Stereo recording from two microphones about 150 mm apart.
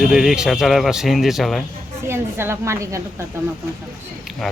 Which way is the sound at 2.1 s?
15° right (ahead or behind).